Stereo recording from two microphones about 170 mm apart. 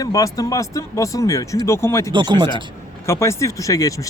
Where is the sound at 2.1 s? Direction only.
25° right (ahead or behind).